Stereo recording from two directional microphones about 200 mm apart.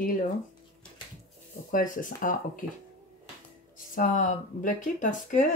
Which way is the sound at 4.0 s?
40° left (ahead or behind).